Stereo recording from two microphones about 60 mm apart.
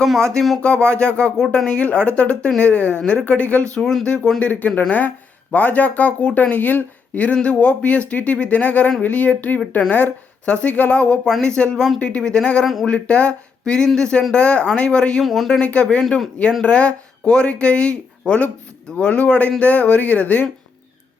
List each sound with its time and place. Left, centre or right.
0.0 s speech: centre; by 3.8 s left
3.8 s speech: centre
4.4 s speech: left
15.2 s speech: centre
15.6 s speech: left
16.0 s speech: centre
16.6 s speech: centre